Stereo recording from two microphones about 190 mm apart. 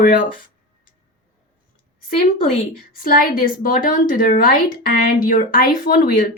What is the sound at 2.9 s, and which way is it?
Speech, 45° left (ahead or behind).